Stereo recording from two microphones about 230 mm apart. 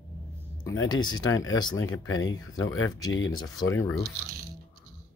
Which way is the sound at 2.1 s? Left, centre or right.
Left.